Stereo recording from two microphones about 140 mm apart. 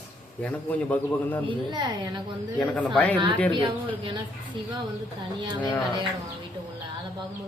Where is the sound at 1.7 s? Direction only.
30° right (ahead or behind).